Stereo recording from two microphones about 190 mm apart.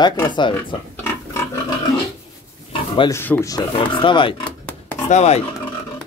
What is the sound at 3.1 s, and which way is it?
Speech, 10° left (ahead or behind).